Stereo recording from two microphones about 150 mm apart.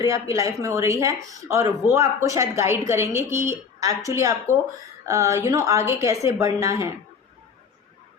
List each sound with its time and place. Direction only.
0.0 s speech: 20° right (ahead or behind)